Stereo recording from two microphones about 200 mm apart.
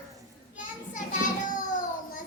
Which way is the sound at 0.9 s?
40° left (ahead or behind).